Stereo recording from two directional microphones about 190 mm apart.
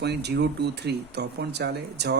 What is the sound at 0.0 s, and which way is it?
Speech, 60° right (ahead or behind).